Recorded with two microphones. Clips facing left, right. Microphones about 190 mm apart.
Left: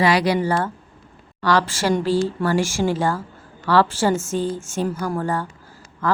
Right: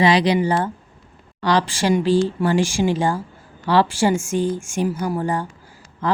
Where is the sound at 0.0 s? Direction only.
20° right (ahead or behind).